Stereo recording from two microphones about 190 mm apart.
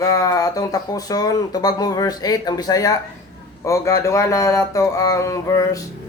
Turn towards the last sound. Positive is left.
turn(degrees=20)  # may be behind; listen again after turning